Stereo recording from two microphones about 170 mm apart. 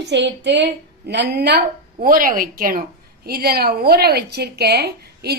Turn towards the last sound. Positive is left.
turn(degrees=-70)  # may be behind; listen again after turning